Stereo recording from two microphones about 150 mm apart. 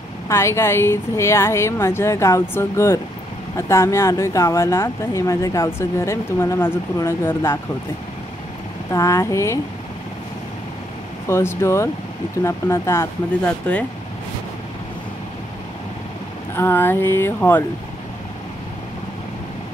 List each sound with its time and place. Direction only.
0.3 s a woman's voice: 15° left (ahead or behind)
8.9 s speech: 20° left (ahead or behind)
11.2 s a woman's voice: 20° left (ahead or behind)
16.5 s a woman's voice: 15° left (ahead or behind)